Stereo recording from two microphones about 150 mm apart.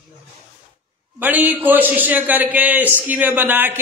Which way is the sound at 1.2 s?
10° right (ahead or behind).